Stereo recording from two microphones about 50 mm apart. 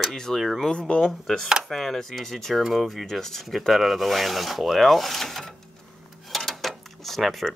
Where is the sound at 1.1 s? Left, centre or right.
Centre.